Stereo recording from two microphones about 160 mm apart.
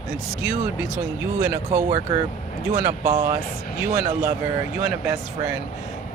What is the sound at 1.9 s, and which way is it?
Speech, 25° right (ahead or behind).